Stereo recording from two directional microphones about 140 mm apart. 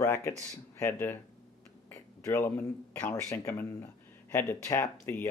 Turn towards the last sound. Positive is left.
turn(degrees=15)  # may be behind; listen again after turning